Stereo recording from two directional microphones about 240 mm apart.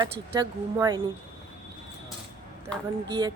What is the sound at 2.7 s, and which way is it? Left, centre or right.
Speech, centre.